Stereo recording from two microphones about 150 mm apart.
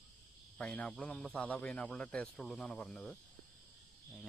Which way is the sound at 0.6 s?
5° left (ahead or behind).